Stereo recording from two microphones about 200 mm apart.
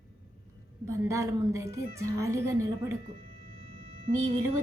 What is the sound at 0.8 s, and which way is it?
A woman's voice, 15° right (ahead or behind).